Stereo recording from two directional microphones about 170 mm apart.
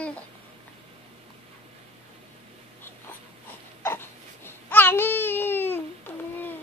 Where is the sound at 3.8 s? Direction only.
15° left (ahead or behind).